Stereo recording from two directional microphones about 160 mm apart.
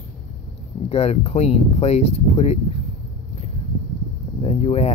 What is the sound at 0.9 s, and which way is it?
Speech, 40° left (ahead or behind).